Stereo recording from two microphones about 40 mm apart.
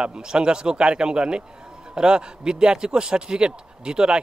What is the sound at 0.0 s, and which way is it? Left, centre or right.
Speech, right.